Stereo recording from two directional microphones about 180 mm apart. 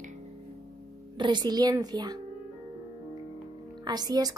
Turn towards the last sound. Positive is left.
turn(degrees=-20)  # may be behind; listen again after turning